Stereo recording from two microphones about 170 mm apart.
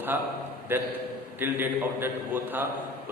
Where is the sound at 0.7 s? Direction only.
10° right (ahead or behind).